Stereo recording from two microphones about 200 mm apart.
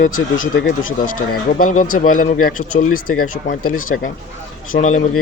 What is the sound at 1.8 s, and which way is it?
A man's voice, 40° left (ahead or behind).